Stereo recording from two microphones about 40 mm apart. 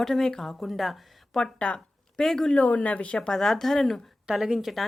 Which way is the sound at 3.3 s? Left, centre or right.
Centre.